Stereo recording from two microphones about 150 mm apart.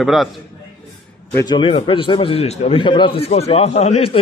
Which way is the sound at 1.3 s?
30° left (ahead or behind).